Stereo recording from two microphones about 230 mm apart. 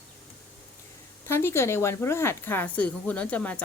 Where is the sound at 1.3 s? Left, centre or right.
Centre.